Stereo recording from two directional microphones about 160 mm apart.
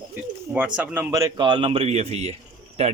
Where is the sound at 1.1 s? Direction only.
20° right (ahead or behind); by 2.9 s 45° right (ahead or behind).